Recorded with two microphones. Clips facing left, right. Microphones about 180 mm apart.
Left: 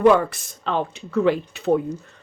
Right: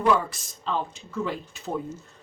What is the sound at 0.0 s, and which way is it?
Speech, 60° left (ahead or behind).